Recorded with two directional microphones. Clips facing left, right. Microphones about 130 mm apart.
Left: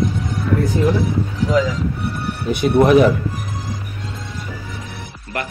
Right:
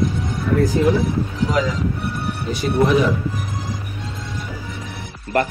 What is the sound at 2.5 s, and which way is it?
Speech, 60° left (ahead or behind).